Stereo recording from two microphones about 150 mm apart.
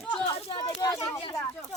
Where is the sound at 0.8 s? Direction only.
25° left (ahead or behind).